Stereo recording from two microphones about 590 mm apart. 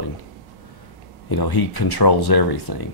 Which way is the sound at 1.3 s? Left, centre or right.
Left.